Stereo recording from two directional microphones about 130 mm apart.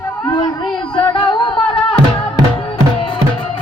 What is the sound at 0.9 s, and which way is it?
Music, 40° left (ahead or behind).